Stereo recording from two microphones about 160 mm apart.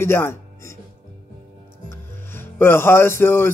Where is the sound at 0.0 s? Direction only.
15° left (ahead or behind).